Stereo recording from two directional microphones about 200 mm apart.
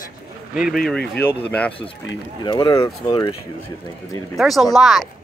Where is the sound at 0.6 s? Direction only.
Centre (ahead or behind).